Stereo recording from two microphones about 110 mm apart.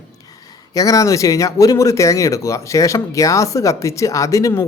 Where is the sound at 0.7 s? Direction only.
30° left (ahead or behind).